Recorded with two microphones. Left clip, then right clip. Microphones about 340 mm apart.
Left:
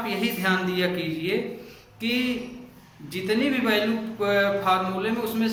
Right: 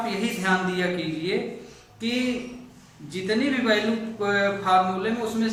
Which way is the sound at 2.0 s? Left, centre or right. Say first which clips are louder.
Left 1 dB; centre.